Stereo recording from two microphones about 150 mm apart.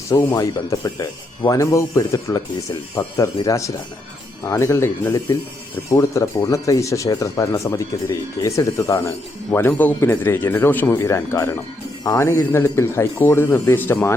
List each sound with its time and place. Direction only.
0.1 s speech: 20° left (ahead or behind)